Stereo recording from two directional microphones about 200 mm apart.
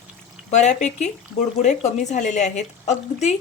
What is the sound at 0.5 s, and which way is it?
Speech, 35° left (ahead or behind).